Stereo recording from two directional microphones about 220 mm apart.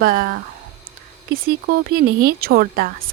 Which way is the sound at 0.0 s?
40° right (ahead or behind).